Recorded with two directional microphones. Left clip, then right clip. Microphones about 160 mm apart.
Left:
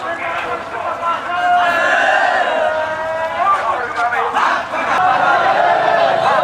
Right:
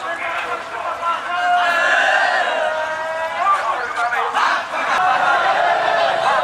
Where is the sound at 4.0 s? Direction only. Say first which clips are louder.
Left 2 dB; 10° left (ahead or behind).